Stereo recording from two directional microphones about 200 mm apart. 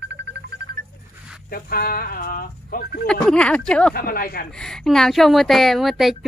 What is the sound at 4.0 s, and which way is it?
Speech, 50° left (ahead or behind).